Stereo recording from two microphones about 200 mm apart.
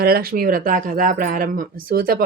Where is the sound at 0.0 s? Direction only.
50° right (ahead or behind).